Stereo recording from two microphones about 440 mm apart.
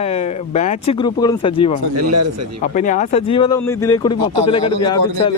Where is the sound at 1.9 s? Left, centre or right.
Right.